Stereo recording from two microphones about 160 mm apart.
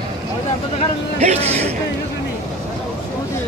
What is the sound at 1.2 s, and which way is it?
Speech, 45° right (ahead or behind).